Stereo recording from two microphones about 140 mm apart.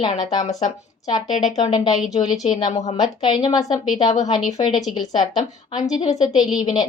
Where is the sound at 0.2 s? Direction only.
30° left (ahead or behind).